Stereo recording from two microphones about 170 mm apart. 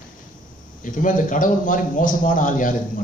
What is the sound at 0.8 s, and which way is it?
A man's voice, 50° left (ahead or behind).